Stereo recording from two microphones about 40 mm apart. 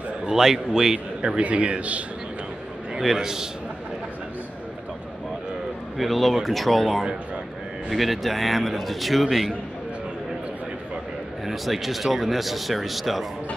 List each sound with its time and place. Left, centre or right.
0.3 s a man's voice: centre
0.9 s a man's voice: right
1.4 s a man's voice: right
3.0 s a man's voice: centre
5.9 s speech: centre
11.4 s speech: centre